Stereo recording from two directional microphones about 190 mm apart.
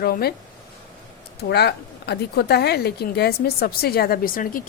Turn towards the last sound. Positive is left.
turn(degrees=50)  # may be behind; listen again after turning